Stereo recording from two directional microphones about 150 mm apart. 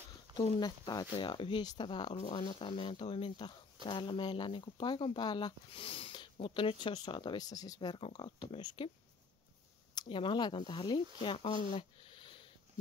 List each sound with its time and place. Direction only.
0.6 s speech: 25° left (ahead or behind)
2.1 s speech: 45° left (ahead or behind)
9.9 s speech: 35° left (ahead or behind)